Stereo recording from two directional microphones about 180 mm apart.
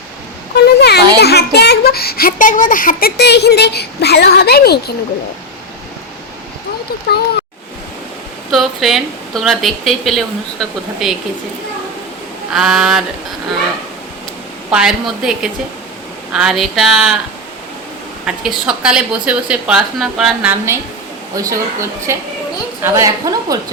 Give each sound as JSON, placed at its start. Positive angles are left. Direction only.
{"t": 0.5, "sound": "a sound", "side_deg": 65}
{"t": 1.2, "sound": "speech", "side_deg": 65}
{"t": 8.4, "sound": "a woman's voice", "side_deg": 0}
{"t": 12.5, "sound": "a woman's voice", "side_deg": 0}
{"t": 14.7, "sound": "a woman's voice", "side_deg": -5}
{"t": 18.3, "sound": "a woman's voice", "side_deg": -5}